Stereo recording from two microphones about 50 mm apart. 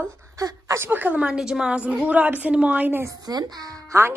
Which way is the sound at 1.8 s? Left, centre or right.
Right.